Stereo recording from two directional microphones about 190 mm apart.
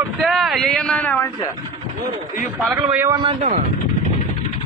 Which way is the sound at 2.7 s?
20° right (ahead or behind).